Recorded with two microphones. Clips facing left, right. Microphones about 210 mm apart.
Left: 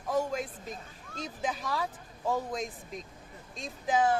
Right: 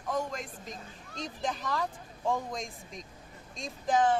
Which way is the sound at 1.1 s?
5° left (ahead or behind).